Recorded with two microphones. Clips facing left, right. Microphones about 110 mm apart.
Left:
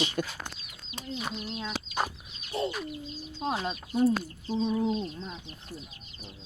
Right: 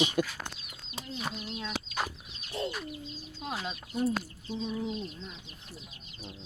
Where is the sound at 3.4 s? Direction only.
35° left (ahead or behind).